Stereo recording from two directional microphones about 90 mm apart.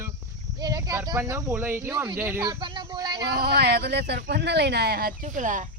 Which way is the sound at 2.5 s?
70° right (ahead or behind).